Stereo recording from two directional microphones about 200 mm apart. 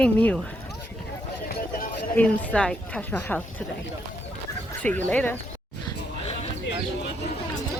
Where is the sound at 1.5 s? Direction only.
50° left (ahead or behind).